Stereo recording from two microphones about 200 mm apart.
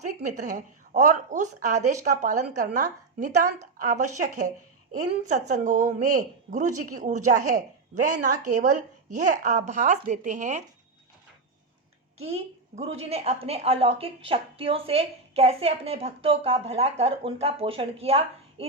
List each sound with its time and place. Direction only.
0.2 s a woman's voice: 40° right (ahead or behind)
12.2 s a woman's voice: 30° right (ahead or behind)